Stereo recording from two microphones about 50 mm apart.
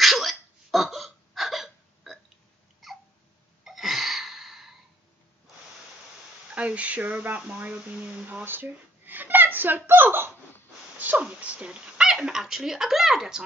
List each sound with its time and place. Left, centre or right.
0.0 s hiccup: centre
2.8 s babbling: centre
3.6 s gasp: centre
6.5 s speech: right
8.5 s speech: right
11.0 s speech: right
11.2 s speech: right